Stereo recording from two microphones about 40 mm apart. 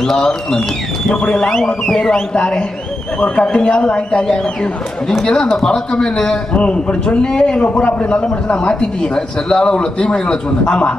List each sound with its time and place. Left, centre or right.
0.0 s a man's voice: centre
6.5 s a man's voice: left